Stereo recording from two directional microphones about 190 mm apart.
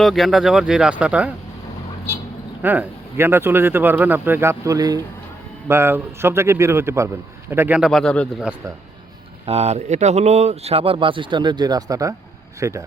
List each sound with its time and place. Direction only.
0.0 s speech: centre (ahead or behind)
2.6 s a man's voice: 10° right (ahead or behind)
9.5 s a man's voice: 35° right (ahead or behind); by 12.8 s 15° right (ahead or behind)